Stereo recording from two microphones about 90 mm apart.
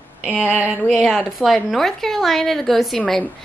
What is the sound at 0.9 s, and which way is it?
A woman's voice, 5° right (ahead or behind).